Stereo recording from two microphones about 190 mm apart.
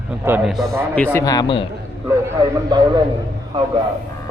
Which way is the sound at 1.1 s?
20° left (ahead or behind).